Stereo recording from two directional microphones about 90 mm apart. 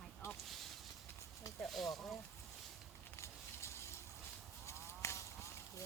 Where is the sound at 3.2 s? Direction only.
30° left (ahead or behind).